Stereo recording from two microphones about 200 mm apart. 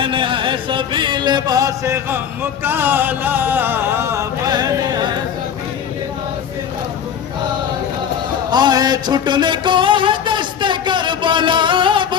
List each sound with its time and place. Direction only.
0.0 s chant: 25° right (ahead or behind)
8.4 s music: 20° right (ahead or behind)